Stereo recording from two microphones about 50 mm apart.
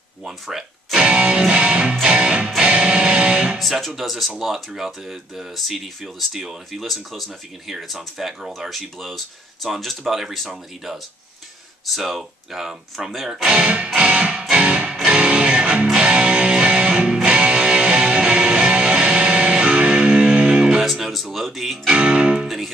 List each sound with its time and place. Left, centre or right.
0.2 s speech: centre
0.9 s music: centre
3.5 s speech: centre
11.9 s speech: centre
13.9 s music: right
20.8 s speech: centre
21.9 s music: right